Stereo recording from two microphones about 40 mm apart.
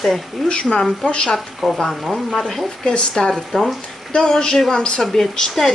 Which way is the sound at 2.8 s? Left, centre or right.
Left.